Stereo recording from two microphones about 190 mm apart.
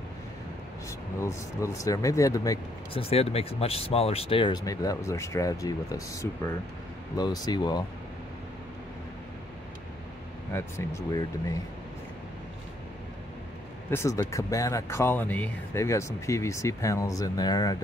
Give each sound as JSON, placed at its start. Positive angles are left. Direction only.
{"t": 1.2, "sound": "speech", "side_deg": 15}
{"t": 3.0, "sound": "speech", "side_deg": 30}
{"t": 10.5, "sound": "speech", "side_deg": 15}
{"t": 13.8, "sound": "speech", "side_deg": 15}